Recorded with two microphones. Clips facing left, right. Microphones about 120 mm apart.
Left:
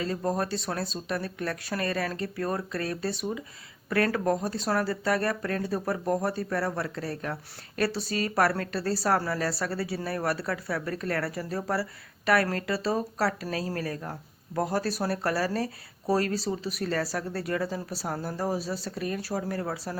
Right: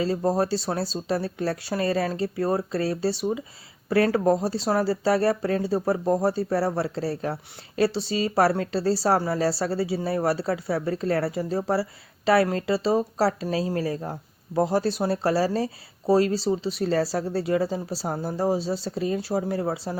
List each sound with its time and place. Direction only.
0.0 s a woman's voice: 30° right (ahead or behind)